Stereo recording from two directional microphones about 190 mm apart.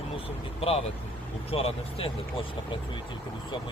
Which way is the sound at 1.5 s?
30° left (ahead or behind).